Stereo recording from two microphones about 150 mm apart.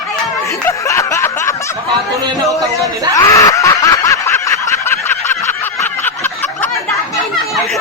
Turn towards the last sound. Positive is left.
turn(degrees=15)  # may be behind; listen again after turning